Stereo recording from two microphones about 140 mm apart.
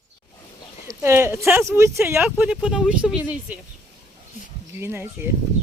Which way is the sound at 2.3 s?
5° right (ahead or behind).